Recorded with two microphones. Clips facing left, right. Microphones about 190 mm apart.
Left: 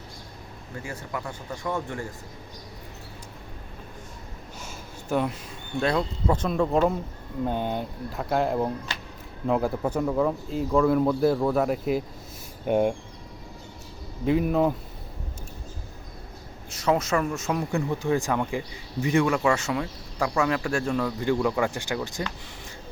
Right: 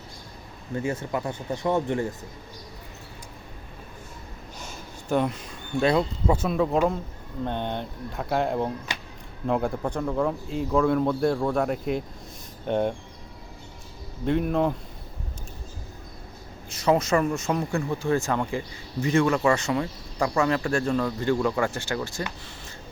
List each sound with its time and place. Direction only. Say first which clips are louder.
0.8 s speech: right 7 dB; 25° right (ahead or behind)
4.6 s a sound: right 1 dB; 5° left (ahead or behind)
5.8 s speech: right 3 dB; 5° right (ahead or behind)
14.3 s speech: left 1 dB; 5° left (ahead or behind)
16.6 s speech: right 2 dB; centre (ahead or behind)
17.7 s speech: left 2 dB; 20° left (ahead or behind)